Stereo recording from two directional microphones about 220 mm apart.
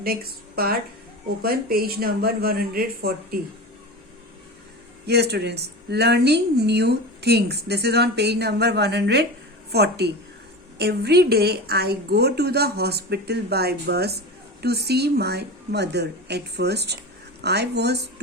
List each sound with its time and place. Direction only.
0.0 s speech: 45° right (ahead or behind)
5.0 s speech: 50° right (ahead or behind)